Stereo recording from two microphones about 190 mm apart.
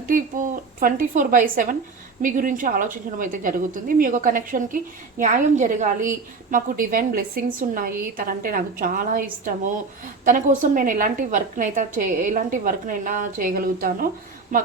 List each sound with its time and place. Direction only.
0.1 s a woman's voice: 45° right (ahead or behind)